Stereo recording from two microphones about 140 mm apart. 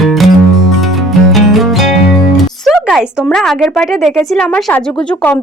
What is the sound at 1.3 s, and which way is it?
Music, centre (ahead or behind).